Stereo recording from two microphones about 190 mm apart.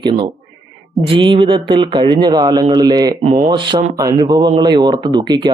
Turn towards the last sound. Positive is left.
turn(degrees=-20)  # may be behind; listen again after turning